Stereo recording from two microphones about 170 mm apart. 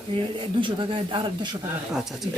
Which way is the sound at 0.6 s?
30° right (ahead or behind).